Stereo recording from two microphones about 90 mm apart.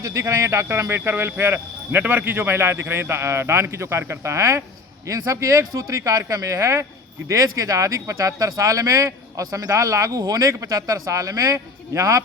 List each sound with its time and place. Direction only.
0.0 s speech: 35° right (ahead or behind)